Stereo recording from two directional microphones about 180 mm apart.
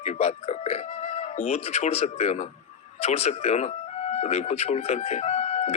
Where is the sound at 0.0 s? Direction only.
40° left (ahead or behind).